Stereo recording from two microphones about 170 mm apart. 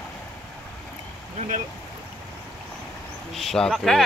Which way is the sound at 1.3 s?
45° right (ahead or behind).